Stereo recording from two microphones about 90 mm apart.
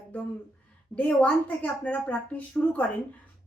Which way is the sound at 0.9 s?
15° left (ahead or behind).